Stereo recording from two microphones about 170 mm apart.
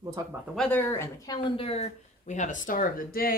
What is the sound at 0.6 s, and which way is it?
Speech, 10° left (ahead or behind).